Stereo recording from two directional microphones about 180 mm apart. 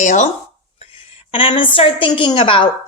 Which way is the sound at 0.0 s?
40° left (ahead or behind).